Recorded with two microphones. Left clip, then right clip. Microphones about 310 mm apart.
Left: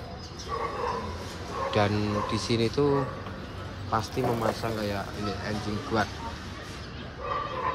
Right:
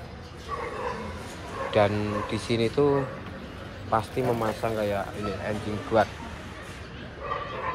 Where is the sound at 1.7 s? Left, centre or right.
Centre.